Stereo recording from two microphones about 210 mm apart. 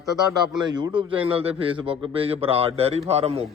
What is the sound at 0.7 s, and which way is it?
A man's voice, 20° right (ahead or behind).